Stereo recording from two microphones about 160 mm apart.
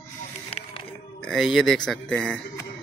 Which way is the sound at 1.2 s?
Centre (ahead or behind).